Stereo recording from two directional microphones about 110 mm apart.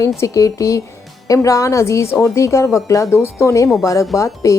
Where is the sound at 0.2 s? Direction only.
30° left (ahead or behind).